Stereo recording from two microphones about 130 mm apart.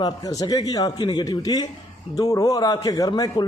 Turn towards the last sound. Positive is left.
turn(degrees=30)  # may be behind; listen again after turning